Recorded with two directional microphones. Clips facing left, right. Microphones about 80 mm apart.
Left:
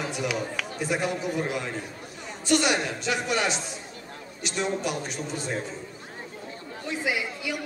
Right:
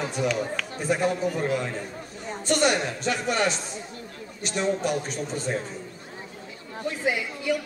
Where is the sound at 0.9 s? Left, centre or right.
Right.